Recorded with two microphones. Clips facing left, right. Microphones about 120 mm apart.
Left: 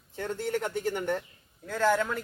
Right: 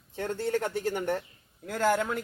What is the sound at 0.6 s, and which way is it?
A man's voice, 15° right (ahead or behind).